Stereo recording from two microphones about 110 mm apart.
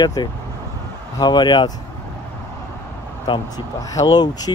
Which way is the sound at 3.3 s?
35° left (ahead or behind).